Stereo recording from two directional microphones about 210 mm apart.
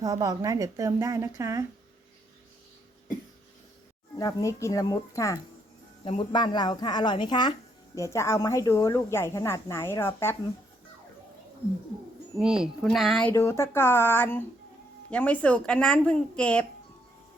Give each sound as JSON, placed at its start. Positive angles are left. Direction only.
{"t": 0.0, "sound": "a woman's voice", "side_deg": -15}
{"t": 4.2, "sound": "a woman's voice", "side_deg": 15}
{"t": 12.4, "sound": "speech", "side_deg": -5}
{"t": 13.3, "sound": "a woman's voice", "side_deg": 10}